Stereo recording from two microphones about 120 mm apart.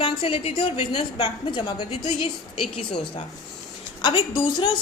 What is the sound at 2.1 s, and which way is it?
Speech, 55° left (ahead or behind).